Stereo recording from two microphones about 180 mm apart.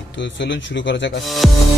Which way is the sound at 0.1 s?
85° left.